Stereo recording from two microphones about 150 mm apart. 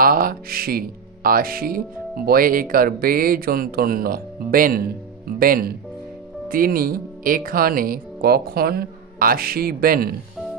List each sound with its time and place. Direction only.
0.0 s speech: 75° right (ahead or behind)